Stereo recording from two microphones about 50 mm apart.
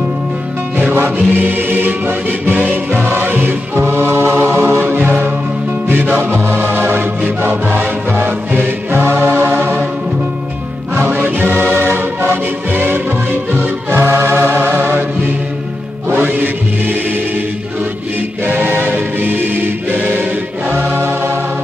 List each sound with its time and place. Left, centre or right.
0.7 s music: right
11.0 s music: right
16.1 s music: right
18.4 s choir: right
20.7 s music: right